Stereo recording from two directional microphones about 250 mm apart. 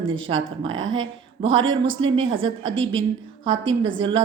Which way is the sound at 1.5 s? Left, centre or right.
Centre.